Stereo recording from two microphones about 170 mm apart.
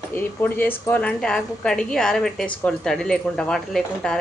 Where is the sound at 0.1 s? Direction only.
10° left (ahead or behind).